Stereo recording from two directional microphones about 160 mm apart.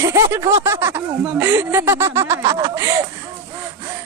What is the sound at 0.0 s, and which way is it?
Speech, 15° right (ahead or behind).